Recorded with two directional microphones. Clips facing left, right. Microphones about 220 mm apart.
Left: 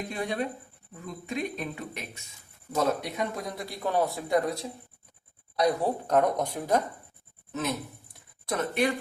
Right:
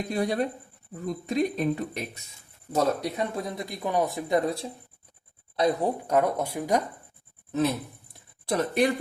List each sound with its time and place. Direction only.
0.1 s speech: 40° right (ahead or behind)
3.7 s speech: 15° right (ahead or behind)
6.1 s speech: 10° right (ahead or behind)
8.4 s speech: 35° right (ahead or behind)